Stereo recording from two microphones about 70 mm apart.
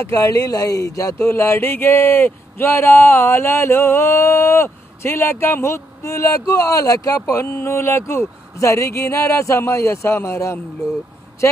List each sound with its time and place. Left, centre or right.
0.1 s speech: left
1.2 s speech: left